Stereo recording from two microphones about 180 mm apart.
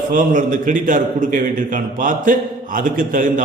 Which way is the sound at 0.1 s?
50° right (ahead or behind).